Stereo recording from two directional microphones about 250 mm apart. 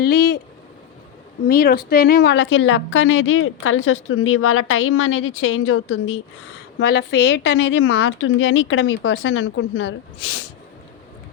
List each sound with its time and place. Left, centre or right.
0.0 s speech: left
1.5 s a woman's voice: left